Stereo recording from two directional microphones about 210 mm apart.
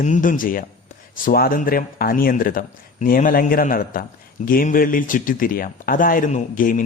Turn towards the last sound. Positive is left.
turn(degrees=40)  # may be behind; listen again after turning